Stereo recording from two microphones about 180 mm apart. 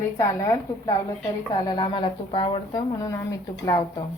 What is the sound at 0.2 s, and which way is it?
A woman's voice, 20° left (ahead or behind).